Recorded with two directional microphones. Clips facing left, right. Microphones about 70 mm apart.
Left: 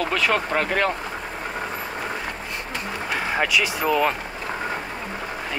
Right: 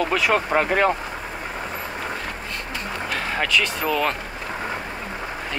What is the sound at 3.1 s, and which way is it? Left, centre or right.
Speech, centre.